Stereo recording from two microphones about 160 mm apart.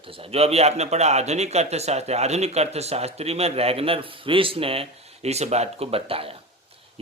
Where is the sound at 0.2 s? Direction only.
40° right (ahead or behind).